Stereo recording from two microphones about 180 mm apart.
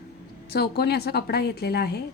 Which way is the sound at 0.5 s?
60° left (ahead or behind).